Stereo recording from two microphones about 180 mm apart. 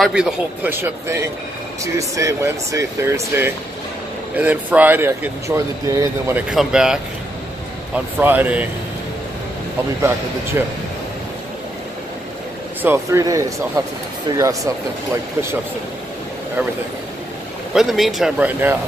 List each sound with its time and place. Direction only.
0.0 s speech: 5° right (ahead or behind)
6.5 s speech: 5° right (ahead or behind)
12.8 s speech: 15° right (ahead or behind)
17.7 s speech: centre (ahead or behind)